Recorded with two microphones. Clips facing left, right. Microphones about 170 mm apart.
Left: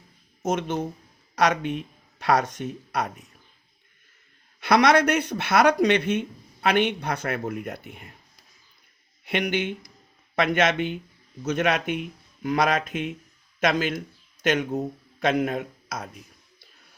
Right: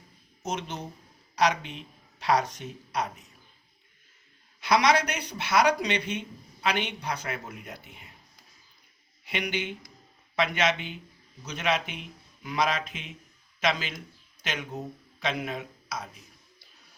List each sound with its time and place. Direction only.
0.4 s speech: 50° left (ahead or behind)
4.6 s speech: 55° left (ahead or behind)
9.2 s speech: 50° left (ahead or behind)